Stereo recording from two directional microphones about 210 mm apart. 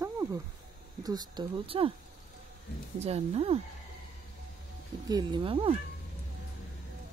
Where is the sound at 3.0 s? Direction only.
30° right (ahead or behind).